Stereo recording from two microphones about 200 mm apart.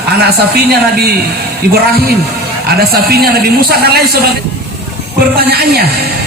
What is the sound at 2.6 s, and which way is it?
Speech, 50° right (ahead or behind).